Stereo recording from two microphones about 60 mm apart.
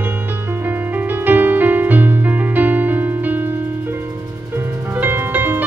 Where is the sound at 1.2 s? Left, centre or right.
Right.